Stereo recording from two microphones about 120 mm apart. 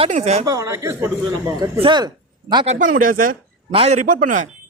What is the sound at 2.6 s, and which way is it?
Speech, 65° right (ahead or behind).